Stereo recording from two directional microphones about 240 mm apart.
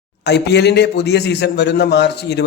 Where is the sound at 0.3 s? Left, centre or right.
Left.